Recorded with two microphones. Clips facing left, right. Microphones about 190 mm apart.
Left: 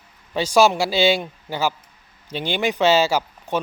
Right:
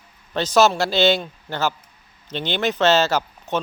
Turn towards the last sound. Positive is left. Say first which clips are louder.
# even
turn(degrees=10)  # may be behind; listen again after turning